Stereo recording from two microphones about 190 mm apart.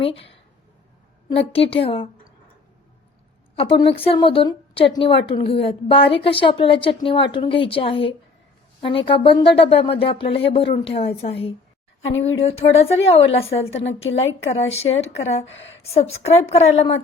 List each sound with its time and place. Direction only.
0.0 s speech: 30° left (ahead or behind)
3.5 s a woman's voice: 30° left (ahead or behind)
15.4 s a woman's voice: 75° left (ahead or behind)
15.8 s a woman's voice: 35° left (ahead or behind)